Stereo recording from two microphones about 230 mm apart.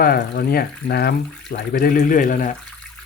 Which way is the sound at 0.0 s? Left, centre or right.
Left.